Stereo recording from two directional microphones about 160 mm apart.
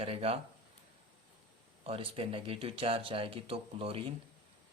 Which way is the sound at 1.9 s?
35° right (ahead or behind).